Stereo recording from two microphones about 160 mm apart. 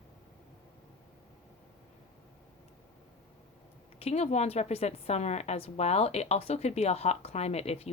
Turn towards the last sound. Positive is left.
turn(degrees=40)  # may be behind; listen again after turning